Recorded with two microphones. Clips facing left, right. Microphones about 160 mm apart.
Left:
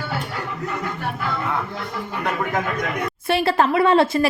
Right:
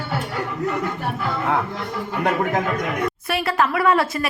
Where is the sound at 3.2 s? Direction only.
30° left (ahead or behind).